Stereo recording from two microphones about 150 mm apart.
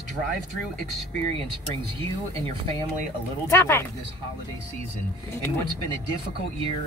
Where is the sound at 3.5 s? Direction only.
15° left (ahead or behind).